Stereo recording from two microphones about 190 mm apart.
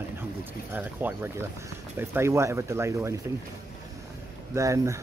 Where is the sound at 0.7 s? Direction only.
10° right (ahead or behind).